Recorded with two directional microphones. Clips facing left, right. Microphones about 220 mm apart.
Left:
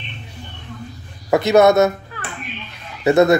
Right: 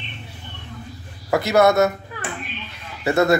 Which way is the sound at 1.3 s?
20° left (ahead or behind).